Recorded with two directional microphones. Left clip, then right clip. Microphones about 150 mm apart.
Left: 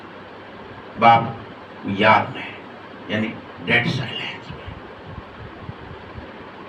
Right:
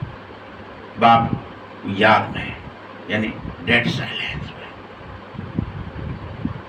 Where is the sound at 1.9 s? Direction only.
15° right (ahead or behind).